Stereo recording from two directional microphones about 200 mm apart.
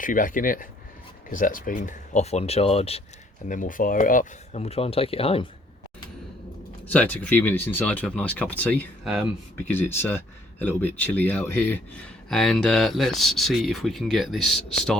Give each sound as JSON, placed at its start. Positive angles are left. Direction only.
{"t": 0.0, "sound": "speech", "side_deg": 40}
{"t": 3.5, "sound": "speech", "side_deg": 40}
{"t": 6.8, "sound": "speech", "side_deg": 10}